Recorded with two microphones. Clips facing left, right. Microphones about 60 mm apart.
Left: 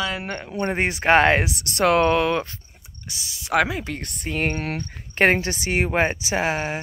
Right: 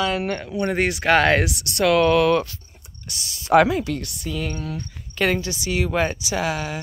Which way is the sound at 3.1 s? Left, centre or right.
Centre.